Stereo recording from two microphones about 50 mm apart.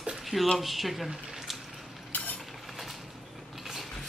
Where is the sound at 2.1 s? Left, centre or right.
Left.